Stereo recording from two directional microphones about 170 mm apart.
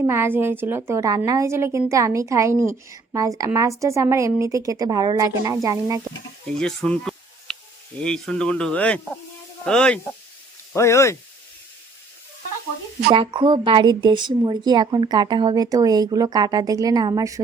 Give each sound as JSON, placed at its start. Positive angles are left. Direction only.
{"t": 0.0, "sound": "a woman's voice", "side_deg": -15}
{"t": 6.6, "sound": "insect", "side_deg": 5}
{"t": 8.0, "sound": "speech", "side_deg": 5}
{"t": 10.8, "sound": "speech", "side_deg": 15}
{"t": 13.1, "sound": "speech", "side_deg": -30}